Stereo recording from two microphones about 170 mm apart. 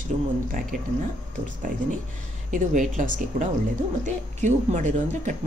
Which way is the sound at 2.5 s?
50° right (ahead or behind).